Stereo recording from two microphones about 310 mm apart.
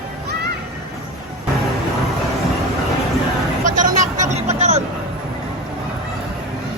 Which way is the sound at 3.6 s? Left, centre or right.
Right.